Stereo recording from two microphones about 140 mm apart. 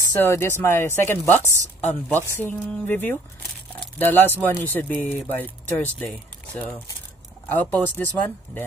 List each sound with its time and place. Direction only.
0.2 s speech: 15° left (ahead or behind)
7.4 s speech: 10° left (ahead or behind)